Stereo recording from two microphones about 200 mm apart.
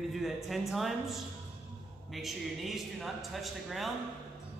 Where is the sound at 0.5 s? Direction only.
Centre (ahead or behind).